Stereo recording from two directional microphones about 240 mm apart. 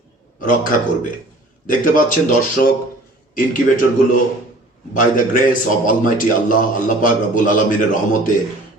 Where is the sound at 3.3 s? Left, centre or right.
Left.